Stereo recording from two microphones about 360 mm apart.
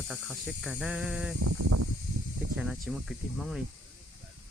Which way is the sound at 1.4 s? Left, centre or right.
Right.